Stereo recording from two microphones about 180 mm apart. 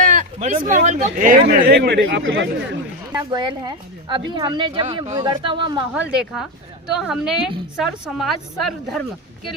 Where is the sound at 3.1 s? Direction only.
25° right (ahead or behind).